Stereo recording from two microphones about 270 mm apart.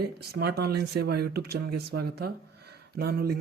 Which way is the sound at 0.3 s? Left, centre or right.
Right.